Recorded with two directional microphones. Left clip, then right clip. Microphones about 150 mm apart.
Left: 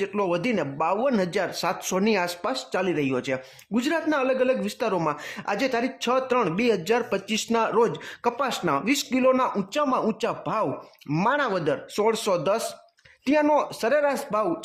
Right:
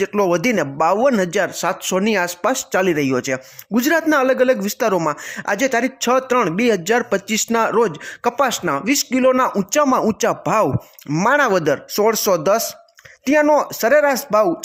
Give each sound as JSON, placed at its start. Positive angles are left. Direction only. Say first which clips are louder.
{"t": 0.0, "sound": "speech", "louder": "right 8 dB", "side_deg": -35}
{"t": 4.9, "sound": "speech", "louder": "right 6 dB", "side_deg": -20}